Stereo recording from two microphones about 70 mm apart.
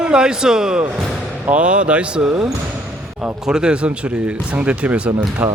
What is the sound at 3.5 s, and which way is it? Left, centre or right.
Speech, centre.